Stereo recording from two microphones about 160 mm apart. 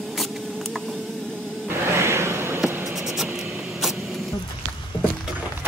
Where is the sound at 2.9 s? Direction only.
Centre (ahead or behind).